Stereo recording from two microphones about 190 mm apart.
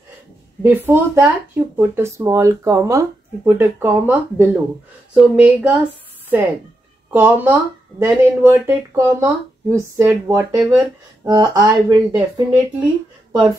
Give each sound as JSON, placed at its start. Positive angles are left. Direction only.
{"t": 0.6, "sound": "speech", "side_deg": -10}
{"t": 7.1, "sound": "speech", "side_deg": -10}